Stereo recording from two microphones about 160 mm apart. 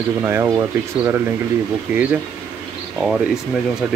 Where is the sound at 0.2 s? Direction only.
15° right (ahead or behind).